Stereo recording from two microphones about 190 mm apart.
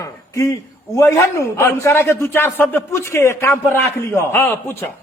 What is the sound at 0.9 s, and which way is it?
A man's voice, 15° left (ahead or behind).